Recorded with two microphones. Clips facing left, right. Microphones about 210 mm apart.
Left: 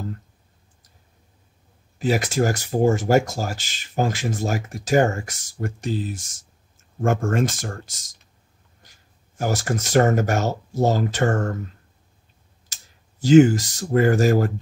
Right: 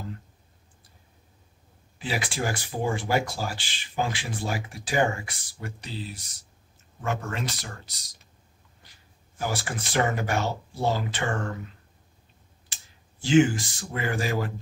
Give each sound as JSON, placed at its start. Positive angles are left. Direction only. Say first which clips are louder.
{"t": 2.0, "sound": "speech", "louder": "left 9 dB", "side_deg": 45}
{"t": 9.4, "sound": "speech", "louder": "left 7 dB", "side_deg": 45}
{"t": 12.7, "sound": "clicking", "louder": "left 1 dB", "side_deg": 40}
{"t": 13.2, "sound": "speech", "louder": "left 7 dB", "side_deg": 40}